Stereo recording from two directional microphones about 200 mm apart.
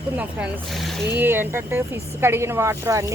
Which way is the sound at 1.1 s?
10° right (ahead or behind).